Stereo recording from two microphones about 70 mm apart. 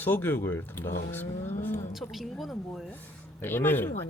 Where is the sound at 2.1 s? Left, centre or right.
Centre.